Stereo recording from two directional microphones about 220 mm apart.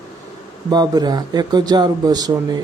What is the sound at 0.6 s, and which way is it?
Speech, 20° right (ahead or behind).